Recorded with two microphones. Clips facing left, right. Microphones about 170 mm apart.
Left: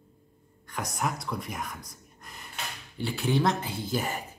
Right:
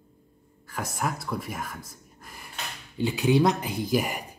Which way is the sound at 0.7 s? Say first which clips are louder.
Right 1 dB; 5° right (ahead or behind).